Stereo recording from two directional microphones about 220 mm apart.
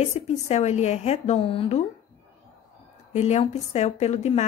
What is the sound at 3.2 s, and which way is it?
Speech, 30° left (ahead or behind).